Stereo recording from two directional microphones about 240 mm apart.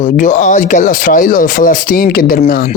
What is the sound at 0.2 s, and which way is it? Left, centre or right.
Speech, left.